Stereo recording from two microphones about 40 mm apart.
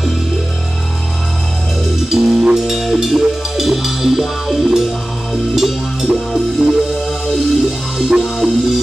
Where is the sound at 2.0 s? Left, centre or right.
Centre.